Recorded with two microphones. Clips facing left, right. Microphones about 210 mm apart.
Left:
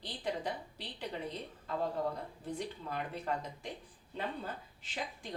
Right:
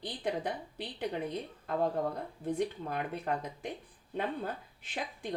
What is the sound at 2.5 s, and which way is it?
A woman's voice, 55° right (ahead or behind).